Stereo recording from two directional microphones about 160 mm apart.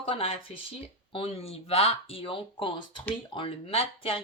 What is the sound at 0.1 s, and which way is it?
Speech, 35° left (ahead or behind).